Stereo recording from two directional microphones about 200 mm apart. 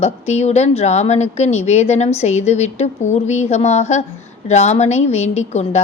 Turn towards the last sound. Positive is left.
turn(degrees=35)  # may be behind; listen again after turning